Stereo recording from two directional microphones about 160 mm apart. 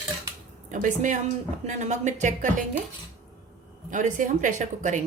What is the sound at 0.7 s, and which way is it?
A woman's voice, 50° right (ahead or behind).